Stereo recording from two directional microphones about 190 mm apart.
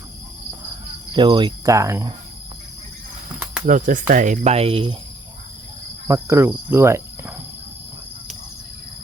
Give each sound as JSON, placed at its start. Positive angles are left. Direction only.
{"t": 1.1, "sound": "speech", "side_deg": -25}
{"t": 3.7, "sound": "speech", "side_deg": -45}
{"t": 4.1, "sound": "cricket", "side_deg": -40}
{"t": 6.1, "sound": "cricket", "side_deg": -15}